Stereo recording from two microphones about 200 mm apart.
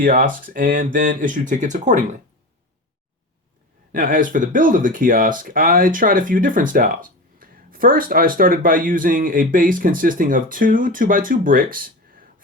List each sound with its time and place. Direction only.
0.0 s speech: 45° right (ahead or behind)
3.9 s speech: 40° right (ahead or behind)